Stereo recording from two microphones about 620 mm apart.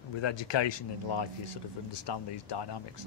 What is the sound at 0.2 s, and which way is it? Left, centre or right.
Speech, left.